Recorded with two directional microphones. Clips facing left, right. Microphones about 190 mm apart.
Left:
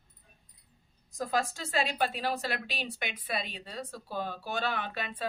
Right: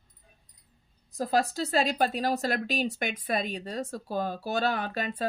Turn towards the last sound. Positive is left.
turn(degrees=-40)  # may be behind; listen again after turning